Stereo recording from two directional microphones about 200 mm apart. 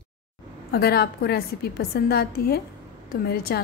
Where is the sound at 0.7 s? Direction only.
50° left (ahead or behind).